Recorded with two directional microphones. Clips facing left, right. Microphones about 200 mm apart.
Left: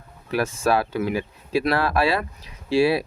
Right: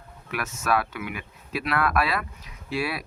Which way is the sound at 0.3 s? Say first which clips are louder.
Left 6 dB; 30° left (ahead or behind).